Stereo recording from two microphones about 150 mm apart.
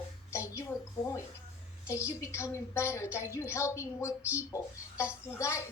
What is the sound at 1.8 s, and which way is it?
A woman's voice, 20° left (ahead or behind).